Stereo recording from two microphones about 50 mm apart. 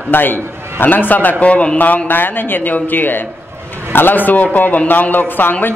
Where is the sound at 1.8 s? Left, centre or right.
Left.